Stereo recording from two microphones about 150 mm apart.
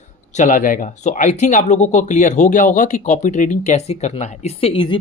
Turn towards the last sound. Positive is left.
turn(degrees=35)  # may be behind; listen again after turning